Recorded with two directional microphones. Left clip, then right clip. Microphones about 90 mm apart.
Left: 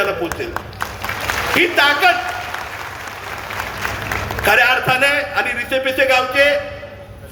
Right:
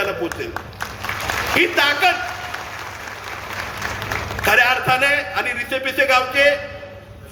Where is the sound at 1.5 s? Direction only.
25° right (ahead or behind).